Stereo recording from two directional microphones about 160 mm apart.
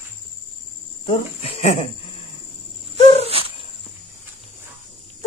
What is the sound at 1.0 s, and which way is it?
Speech, 35° left (ahead or behind).